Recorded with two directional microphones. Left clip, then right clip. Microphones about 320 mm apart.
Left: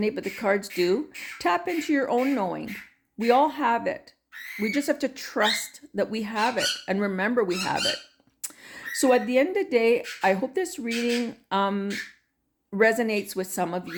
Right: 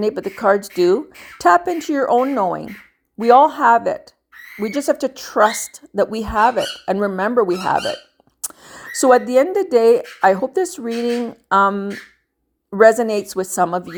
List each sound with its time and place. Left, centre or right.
0.0 s speech: centre